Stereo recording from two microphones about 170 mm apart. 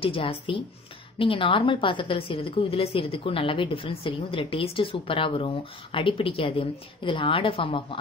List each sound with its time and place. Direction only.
0.0 s a woman's voice: 35° left (ahead or behind)